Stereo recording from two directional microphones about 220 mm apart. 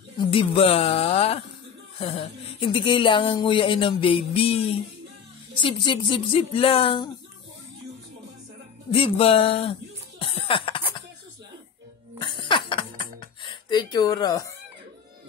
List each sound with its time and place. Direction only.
0.2 s speech: 25° left (ahead or behind)
8.9 s speech: 25° left (ahead or behind)
12.3 s a sound: 20° left (ahead or behind)